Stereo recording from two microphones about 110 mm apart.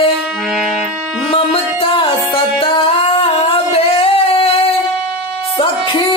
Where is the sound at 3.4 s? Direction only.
60° left (ahead or behind).